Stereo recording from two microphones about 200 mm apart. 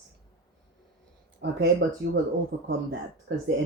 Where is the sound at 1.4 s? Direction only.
60° right (ahead or behind).